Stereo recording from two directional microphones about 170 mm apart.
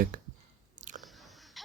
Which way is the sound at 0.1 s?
55° right (ahead or behind).